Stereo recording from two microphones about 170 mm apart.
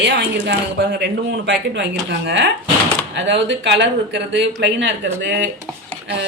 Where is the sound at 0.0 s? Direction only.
90° right.